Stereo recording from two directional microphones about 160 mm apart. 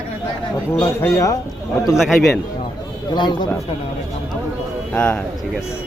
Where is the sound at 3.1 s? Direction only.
30° left (ahead or behind).